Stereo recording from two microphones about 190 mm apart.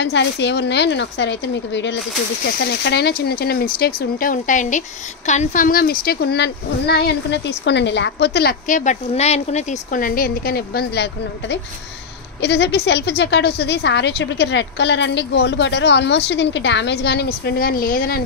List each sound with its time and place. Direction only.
0.0 s speech: 65° left (ahead or behind)
2.4 s speech: 60° left (ahead or behind)
8.6 s speech: 40° left (ahead or behind)